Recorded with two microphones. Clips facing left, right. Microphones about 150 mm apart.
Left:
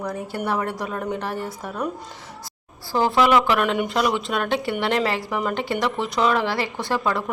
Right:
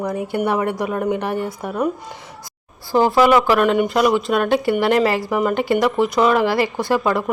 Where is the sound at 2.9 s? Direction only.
15° right (ahead or behind).